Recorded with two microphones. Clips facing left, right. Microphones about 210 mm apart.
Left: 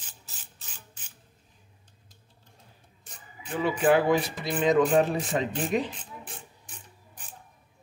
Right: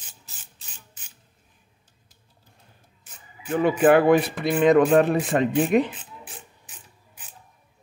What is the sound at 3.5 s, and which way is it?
A man's voice, 55° right (ahead or behind).